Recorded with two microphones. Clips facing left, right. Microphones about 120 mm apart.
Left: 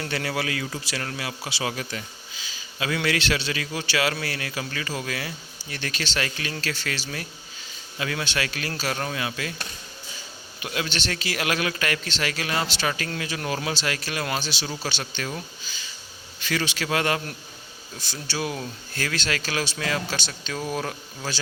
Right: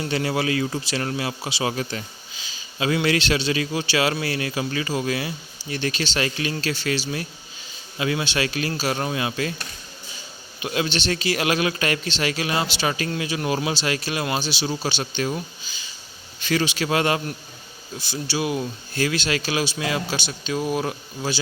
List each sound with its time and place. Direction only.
0.0 s a man's voice: 20° right (ahead or behind)
1.7 s a man's voice: 35° right (ahead or behind)
7.9 s a man's voice: 20° right (ahead or behind)
10.6 s a man's voice: 25° right (ahead or behind)
18.1 s speech: 10° right (ahead or behind)